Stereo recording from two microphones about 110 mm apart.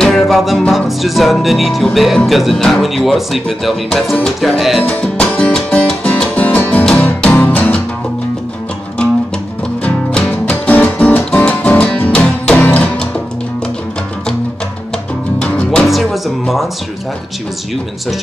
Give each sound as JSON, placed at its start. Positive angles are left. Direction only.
{"t": 0.0, "sound": "speech", "side_deg": 0}
{"t": 4.8, "sound": "music", "side_deg": 10}
{"t": 9.8, "sound": "music", "side_deg": 10}
{"t": 15.4, "sound": "music", "side_deg": 10}